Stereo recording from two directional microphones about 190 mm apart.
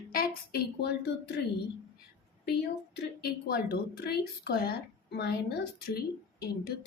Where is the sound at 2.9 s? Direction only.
55° left (ahead or behind).